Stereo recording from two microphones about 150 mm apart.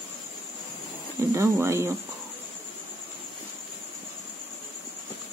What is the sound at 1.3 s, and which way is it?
Speech, 20° right (ahead or behind).